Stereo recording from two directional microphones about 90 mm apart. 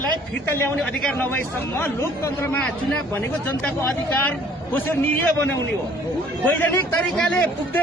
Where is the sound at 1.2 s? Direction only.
20° left (ahead or behind).